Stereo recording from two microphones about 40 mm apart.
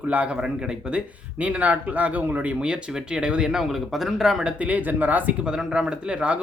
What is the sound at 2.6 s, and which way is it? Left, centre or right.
Speech, right.